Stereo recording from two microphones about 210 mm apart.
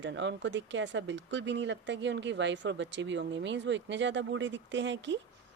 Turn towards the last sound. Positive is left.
turn(degrees=-60)  # may be behind; listen again after turning